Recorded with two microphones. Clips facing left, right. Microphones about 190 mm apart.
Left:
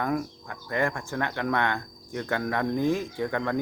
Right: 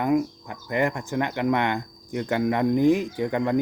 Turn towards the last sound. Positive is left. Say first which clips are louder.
# right 4 dB
turn(degrees=-15)  # may be behind; listen again after turning